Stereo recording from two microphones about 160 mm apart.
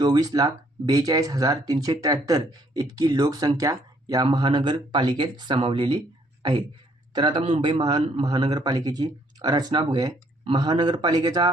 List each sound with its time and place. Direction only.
0.0 s speech: 25° right (ahead or behind)
7.1 s speech: 30° right (ahead or behind)